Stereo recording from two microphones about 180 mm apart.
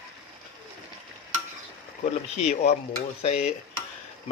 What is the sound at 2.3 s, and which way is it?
Dishes, 40° left (ahead or behind).